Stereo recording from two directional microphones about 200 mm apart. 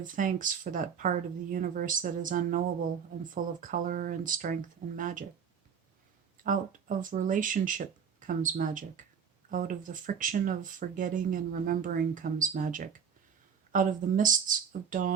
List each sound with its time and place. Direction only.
0.0 s speech: 40° right (ahead or behind)
6.4 s speech: 40° right (ahead or behind)